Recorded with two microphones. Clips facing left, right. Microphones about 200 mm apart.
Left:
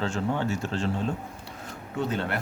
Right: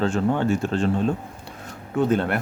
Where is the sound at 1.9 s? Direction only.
50° right (ahead or behind).